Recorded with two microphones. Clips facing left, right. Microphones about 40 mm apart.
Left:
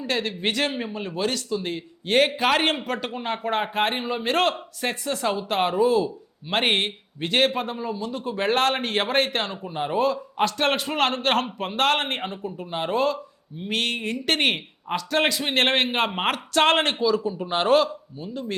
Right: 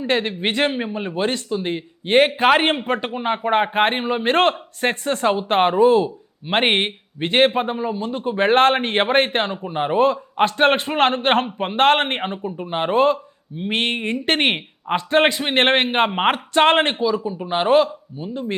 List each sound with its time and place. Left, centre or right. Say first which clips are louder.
0.0 s speech: right 5 dB; right